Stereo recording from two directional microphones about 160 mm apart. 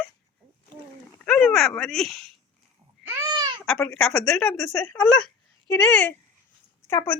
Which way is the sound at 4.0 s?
5° left (ahead or behind).